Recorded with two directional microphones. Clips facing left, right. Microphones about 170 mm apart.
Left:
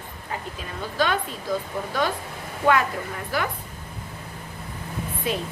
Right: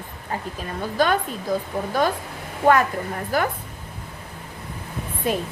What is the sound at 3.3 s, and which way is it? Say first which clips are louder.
Speech: right 4 dB; 45° right (ahead or behind).